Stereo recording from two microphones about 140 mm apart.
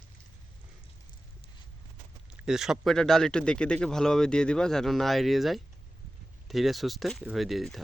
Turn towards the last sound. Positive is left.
turn(degrees=0)  # may be behind; listen again after turning